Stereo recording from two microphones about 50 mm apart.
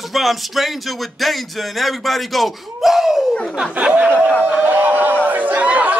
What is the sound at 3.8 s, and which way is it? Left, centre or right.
Speech, right.